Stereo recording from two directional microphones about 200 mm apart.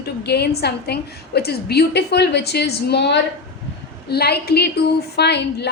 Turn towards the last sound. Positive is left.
turn(degrees=55)  # may be behind; listen again after turning